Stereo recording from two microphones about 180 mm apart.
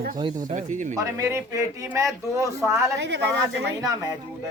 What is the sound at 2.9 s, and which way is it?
Speech, 80° right.